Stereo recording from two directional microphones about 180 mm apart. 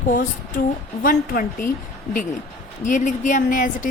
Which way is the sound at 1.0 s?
50° left (ahead or behind).